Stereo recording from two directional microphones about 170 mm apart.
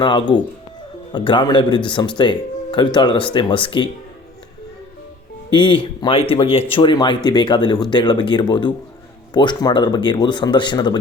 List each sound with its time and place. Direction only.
0.0 s speech: 25° left (ahead or behind)
5.5 s speech: 30° left (ahead or behind)